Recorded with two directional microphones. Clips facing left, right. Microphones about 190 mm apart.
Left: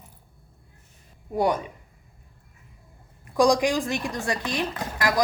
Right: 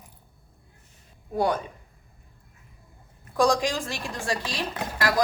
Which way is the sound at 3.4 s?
15° left (ahead or behind).